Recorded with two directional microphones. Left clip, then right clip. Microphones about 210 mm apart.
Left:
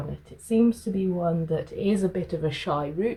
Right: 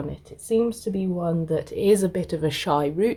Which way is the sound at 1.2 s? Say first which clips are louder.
Right 4 dB; 45° right (ahead or behind).